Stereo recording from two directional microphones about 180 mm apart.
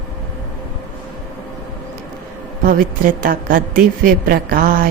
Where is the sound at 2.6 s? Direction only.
50° right (ahead or behind).